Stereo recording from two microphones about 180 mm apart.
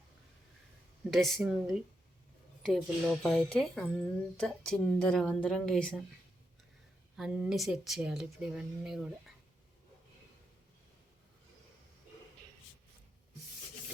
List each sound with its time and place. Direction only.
1.1 s a woman's voice: centre (ahead or behind)
7.2 s a woman's voice: 5° right (ahead or behind)